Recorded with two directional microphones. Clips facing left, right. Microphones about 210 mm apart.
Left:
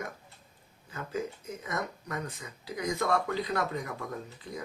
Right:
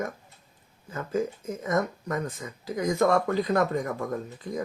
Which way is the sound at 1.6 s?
45° right (ahead or behind).